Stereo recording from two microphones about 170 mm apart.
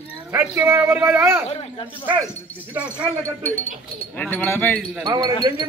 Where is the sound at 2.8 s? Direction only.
10° right (ahead or behind).